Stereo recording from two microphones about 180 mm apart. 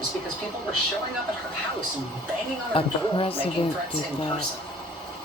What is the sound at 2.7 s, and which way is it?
Speech, 30° left (ahead or behind).